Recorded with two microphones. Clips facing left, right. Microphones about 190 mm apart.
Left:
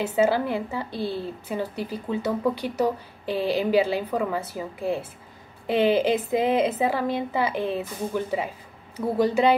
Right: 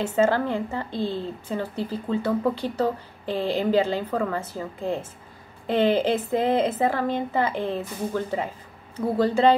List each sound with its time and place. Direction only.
0.0 s a woman's voice: 15° left (ahead or behind)